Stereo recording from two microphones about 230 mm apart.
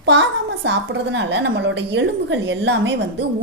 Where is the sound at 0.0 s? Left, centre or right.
Right.